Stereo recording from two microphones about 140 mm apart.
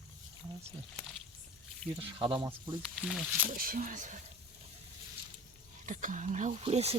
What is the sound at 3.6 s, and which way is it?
Speech, 90° right.